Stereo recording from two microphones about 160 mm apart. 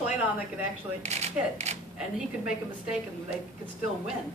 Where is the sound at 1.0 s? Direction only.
45° right (ahead or behind).